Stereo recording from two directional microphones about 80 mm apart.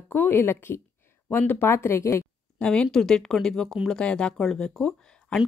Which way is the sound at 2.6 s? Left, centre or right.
Centre.